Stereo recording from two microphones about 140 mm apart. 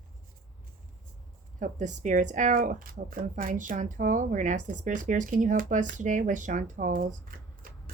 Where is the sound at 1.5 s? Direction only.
60° right (ahead or behind).